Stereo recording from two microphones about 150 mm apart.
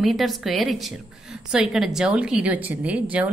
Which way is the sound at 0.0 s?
Centre (ahead or behind).